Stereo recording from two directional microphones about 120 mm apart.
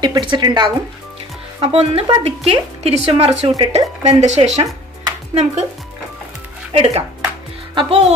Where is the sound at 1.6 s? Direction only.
55° right (ahead or behind).